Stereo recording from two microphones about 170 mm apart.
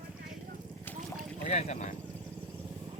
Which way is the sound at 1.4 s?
40° left (ahead or behind).